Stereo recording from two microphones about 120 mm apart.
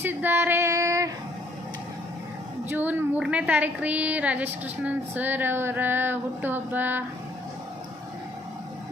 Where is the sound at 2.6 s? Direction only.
15° right (ahead or behind).